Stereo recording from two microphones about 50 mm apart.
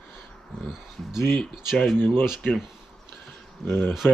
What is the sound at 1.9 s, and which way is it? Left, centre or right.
Speech, left.